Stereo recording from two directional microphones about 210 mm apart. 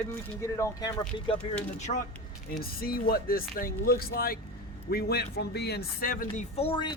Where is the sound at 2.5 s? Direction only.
45° left (ahead or behind).